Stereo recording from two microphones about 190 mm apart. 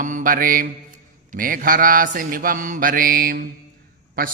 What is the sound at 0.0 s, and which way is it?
Mantra, 45° right (ahead or behind).